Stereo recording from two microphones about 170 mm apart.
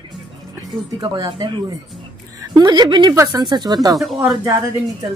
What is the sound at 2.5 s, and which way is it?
Speech, 25° right (ahead or behind).